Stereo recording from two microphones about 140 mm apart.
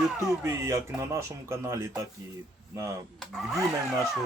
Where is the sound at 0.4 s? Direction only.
20° right (ahead or behind).